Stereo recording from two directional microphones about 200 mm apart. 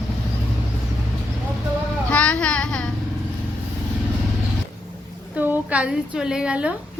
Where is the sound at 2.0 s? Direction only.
5° left (ahead or behind).